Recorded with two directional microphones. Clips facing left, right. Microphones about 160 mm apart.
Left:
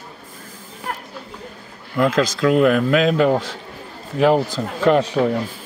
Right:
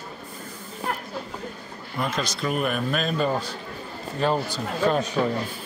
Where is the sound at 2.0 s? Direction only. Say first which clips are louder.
Left 10 dB; 90° left.